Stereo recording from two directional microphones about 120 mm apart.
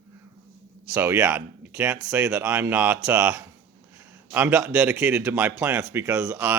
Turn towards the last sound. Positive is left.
turn(degrees=-15)  # may be behind; listen again after turning